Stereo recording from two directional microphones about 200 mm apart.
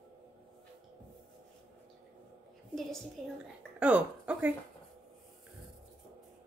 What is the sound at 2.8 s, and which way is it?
A woman's voice, centre (ahead or behind).